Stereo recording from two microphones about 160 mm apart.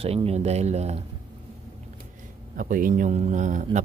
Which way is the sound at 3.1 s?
45° right (ahead or behind).